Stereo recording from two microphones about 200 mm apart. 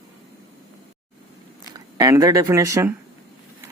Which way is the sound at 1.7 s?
20° right (ahead or behind).